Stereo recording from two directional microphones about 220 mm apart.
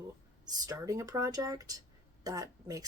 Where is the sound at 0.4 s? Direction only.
15° right (ahead or behind).